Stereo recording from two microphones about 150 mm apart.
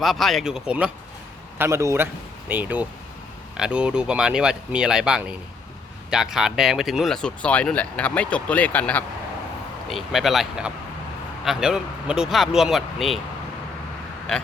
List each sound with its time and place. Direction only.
0.0 s speech: centre (ahead or behind)
1.5 s a man's voice: 15° right (ahead or behind); by 9.0 s 10° left (ahead or behind)
9.9 s speech: centre (ahead or behind)